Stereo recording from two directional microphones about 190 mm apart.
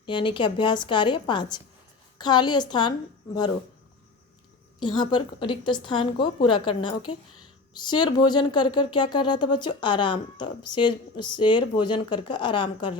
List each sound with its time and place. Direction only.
0.0 s speech: 25° left (ahead or behind)
4.8 s speech: 25° left (ahead or behind)